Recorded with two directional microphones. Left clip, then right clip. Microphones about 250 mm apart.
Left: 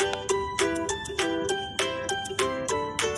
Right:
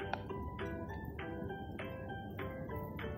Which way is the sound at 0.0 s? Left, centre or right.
Left.